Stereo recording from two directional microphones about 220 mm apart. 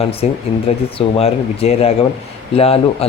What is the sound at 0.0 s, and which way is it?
Speech, 25° left (ahead or behind).